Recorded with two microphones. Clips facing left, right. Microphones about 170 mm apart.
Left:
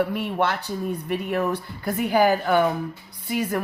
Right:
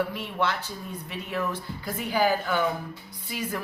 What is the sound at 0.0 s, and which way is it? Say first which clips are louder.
Speech: left 5 dB; 55° left (ahead or behind).